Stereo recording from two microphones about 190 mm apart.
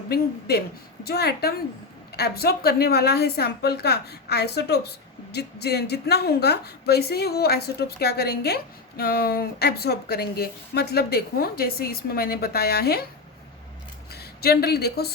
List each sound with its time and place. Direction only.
0.1 s a woman's voice: 55° left (ahead or behind)
14.1 s a woman's voice: 55° left (ahead or behind)